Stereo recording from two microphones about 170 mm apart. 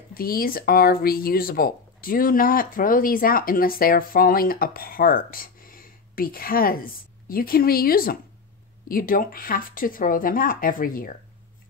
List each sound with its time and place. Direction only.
0.1 s speech: 60° left (ahead or behind)